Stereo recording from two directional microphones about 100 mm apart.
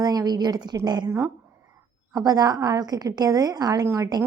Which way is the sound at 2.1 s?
40° right (ahead or behind).